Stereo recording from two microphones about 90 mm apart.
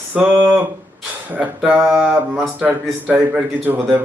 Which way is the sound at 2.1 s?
20° right (ahead or behind).